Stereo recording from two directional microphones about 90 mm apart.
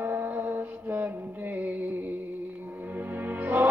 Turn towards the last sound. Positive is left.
turn(degrees=-20)  # may be behind; listen again after turning